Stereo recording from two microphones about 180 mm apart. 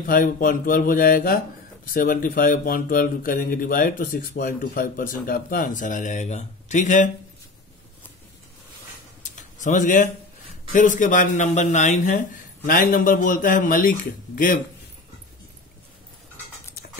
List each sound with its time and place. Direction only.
0.0 s speech: 50° left (ahead or behind)
9.2 s a sound: 45° left (ahead or behind)
10.7 s speech: 45° left (ahead or behind)